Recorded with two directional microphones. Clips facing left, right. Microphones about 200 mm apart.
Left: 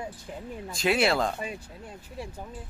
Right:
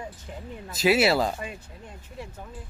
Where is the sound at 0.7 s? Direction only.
5° right (ahead or behind).